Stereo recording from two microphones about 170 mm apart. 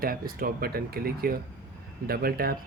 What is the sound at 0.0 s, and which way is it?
Speech, 60° right (ahead or behind).